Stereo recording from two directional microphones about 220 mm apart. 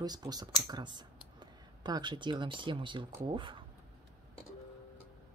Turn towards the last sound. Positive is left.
turn(degrees=-20)  # may be behind; listen again after turning